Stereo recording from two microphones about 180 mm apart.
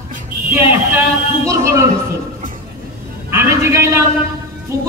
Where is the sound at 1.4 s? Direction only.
15° right (ahead or behind).